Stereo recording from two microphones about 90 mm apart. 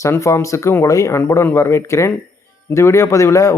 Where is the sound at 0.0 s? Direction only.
35° left (ahead or behind).